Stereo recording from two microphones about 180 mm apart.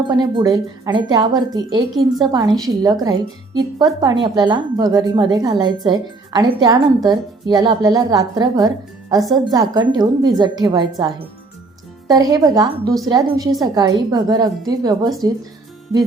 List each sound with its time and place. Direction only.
0.1 s a woman's voice: 20° right (ahead or behind)